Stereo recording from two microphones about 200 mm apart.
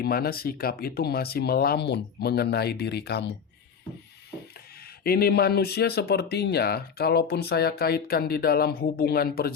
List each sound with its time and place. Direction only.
0.0 s speech: 50° left (ahead or behind)
5.0 s speech: 50° left (ahead or behind)